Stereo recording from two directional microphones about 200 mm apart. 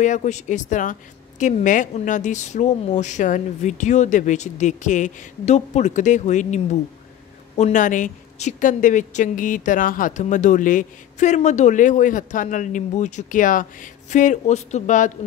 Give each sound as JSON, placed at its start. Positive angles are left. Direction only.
{"t": 0.0, "sound": "speech", "side_deg": 35}